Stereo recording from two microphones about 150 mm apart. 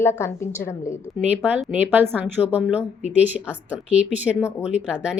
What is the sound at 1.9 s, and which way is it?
A woman's voice, 15° right (ahead or behind).